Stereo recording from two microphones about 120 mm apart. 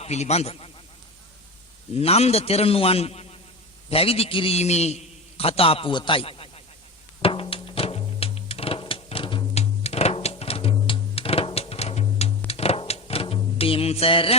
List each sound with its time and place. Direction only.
0.0 s a man's voice: 65° left (ahead or behind)
2.0 s a man's voice: 60° left (ahead or behind)
7.2 s music: 50° left (ahead or behind)
9.6 s music: 60° left (ahead or behind)